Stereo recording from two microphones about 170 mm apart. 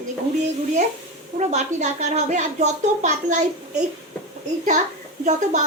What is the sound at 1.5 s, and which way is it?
Speech, 45° right (ahead or behind).